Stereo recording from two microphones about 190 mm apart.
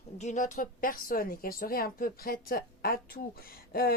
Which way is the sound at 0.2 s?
40° left (ahead or behind).